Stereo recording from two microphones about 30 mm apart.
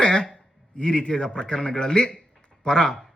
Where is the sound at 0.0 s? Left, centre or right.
Left.